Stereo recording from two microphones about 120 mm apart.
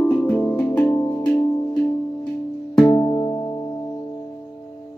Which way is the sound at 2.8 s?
20° left (ahead or behind).